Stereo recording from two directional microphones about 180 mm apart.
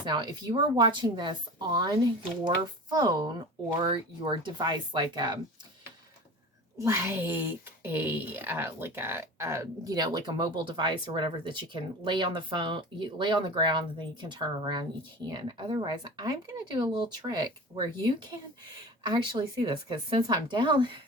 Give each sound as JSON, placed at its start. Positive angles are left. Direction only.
{"t": 0.0, "sound": "speech", "side_deg": -25}
{"t": 6.7, "sound": "speech", "side_deg": -15}